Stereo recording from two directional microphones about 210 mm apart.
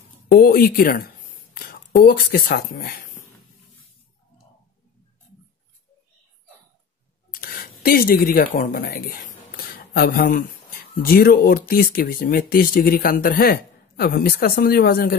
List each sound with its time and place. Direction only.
0.3 s speech: 45° left (ahead or behind)
7.3 s a sound: 45° left (ahead or behind)
8.5 s speech: 45° left (ahead or behind)